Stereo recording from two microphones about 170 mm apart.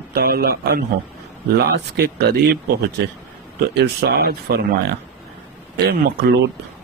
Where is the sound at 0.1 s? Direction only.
60° right (ahead or behind).